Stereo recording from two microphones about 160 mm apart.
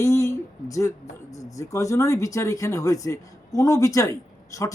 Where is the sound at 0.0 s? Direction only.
20° left (ahead or behind).